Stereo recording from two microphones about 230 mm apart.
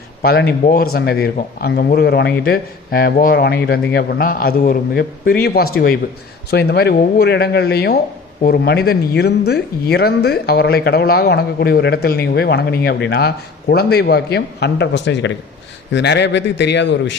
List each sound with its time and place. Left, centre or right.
0.2 s a man's voice: left